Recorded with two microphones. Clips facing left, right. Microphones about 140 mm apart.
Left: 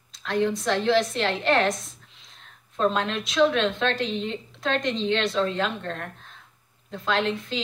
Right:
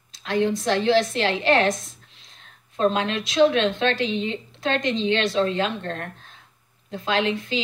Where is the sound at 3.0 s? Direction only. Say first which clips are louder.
Right 4 dB; 90° right.